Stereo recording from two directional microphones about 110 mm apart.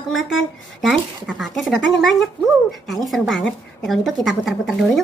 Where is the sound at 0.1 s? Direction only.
Centre (ahead or behind).